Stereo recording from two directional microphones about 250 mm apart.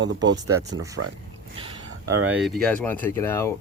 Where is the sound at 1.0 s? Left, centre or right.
Right.